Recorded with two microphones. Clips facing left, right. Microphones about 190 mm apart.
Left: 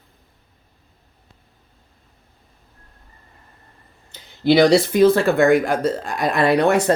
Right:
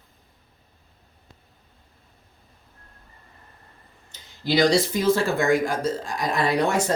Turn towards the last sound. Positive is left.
turn(degrees=60)  # may be behind; listen again after turning